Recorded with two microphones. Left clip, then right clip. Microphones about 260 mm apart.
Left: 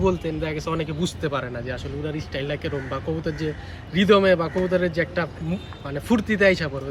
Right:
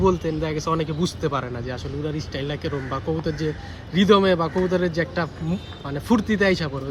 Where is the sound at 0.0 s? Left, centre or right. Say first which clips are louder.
Right 2 dB; right.